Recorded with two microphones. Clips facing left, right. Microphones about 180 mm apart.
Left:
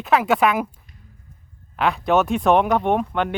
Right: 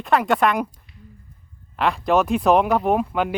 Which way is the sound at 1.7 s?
Centre (ahead or behind).